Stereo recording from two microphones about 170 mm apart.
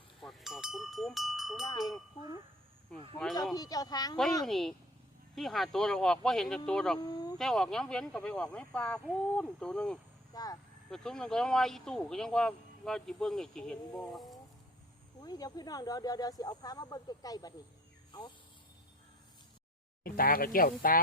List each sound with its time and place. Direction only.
0.2 s speech: centre (ahead or behind)
3.5 s speech: 20° left (ahead or behind)
4.4 s speech: centre (ahead or behind)
7.0 s speech: 25° left (ahead or behind)
7.3 s speech: centre (ahead or behind)
10.3 s speech: 20° left (ahead or behind)
10.9 s speech: 5° left (ahead or behind)
15.2 s speech: 25° left (ahead or behind)
20.1 s speech: 60° left (ahead or behind)